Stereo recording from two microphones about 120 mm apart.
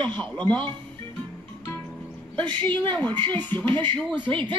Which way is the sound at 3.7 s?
45° right (ahead or behind).